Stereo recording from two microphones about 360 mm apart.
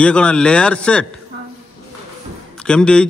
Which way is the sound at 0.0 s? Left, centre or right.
Centre.